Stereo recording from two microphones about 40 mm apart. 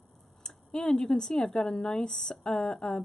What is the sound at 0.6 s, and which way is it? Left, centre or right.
A woman's voice, centre.